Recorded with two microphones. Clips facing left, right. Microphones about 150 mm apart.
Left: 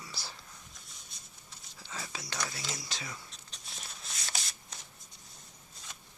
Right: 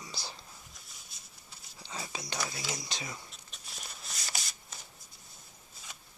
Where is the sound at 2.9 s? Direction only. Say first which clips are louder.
Right 2 dB; 20° right (ahead or behind).